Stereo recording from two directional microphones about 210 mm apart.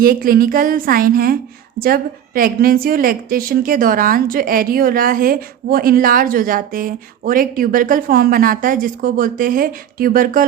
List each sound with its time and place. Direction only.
0.0 s a woman's voice: 45° right (ahead or behind)